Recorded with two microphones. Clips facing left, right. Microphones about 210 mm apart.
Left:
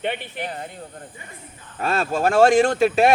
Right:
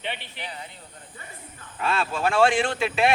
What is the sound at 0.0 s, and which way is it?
Speech, 50° left (ahead or behind).